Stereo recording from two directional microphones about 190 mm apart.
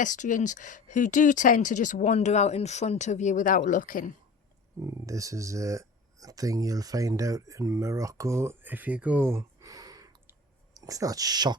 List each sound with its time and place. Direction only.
0.0 s speech: 40° left (ahead or behind)
4.8 s speech: 15° right (ahead or behind)